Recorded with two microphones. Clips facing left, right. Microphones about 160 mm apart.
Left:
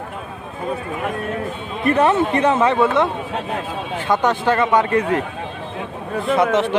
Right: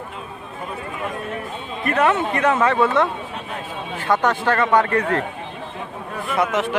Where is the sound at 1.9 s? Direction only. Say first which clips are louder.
Left 3 dB; 30° left (ahead or behind).